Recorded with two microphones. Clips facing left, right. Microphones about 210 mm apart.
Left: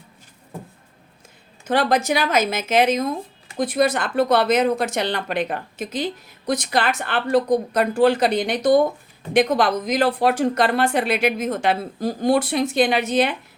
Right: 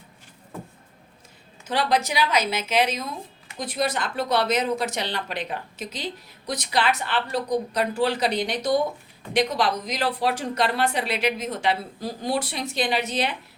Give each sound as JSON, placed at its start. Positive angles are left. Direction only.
{"t": 1.6, "sound": "speech", "side_deg": 50}